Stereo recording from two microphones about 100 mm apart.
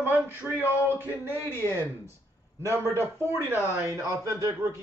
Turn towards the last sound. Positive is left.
turn(degrees=-30)  # may be behind; listen again after turning